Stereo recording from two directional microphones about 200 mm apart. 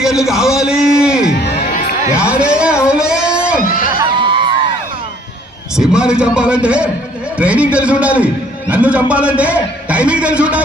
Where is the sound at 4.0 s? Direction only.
25° right (ahead or behind).